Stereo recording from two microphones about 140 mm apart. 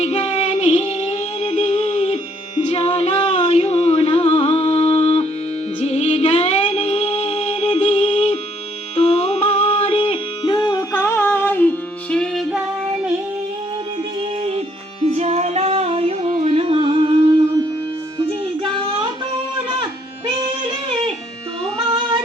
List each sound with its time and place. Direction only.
0.0 s music: 50° left (ahead or behind); by 11.7 s 15° left (ahead or behind)
12.1 s music: centre (ahead or behind)
14.2 s music: 45° right (ahead or behind)
21.8 s music: 35° right (ahead or behind)